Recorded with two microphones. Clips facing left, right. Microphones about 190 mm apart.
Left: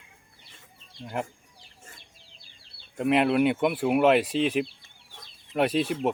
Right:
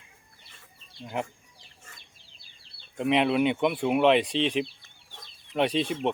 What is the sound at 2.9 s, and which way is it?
Speech, 5° left (ahead or behind).